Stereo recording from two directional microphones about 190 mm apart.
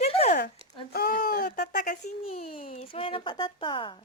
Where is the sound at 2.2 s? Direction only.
30° left (ahead or behind).